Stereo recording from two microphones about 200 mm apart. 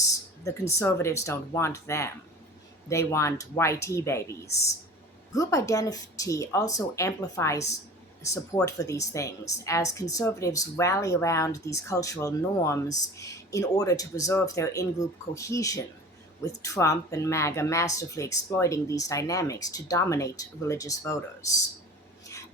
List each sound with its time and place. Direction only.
0.0 s a woman's voice: 15° left (ahead or behind)